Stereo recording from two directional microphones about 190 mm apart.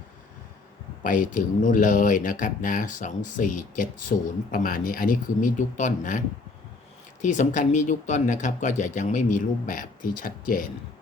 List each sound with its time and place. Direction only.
1.0 s speech: 45° left (ahead or behind)